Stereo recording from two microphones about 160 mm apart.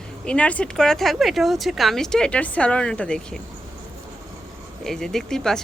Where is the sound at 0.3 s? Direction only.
10° left (ahead or behind).